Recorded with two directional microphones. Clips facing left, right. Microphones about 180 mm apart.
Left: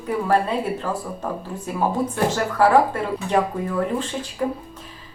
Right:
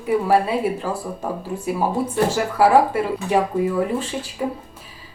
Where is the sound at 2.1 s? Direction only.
10° right (ahead or behind).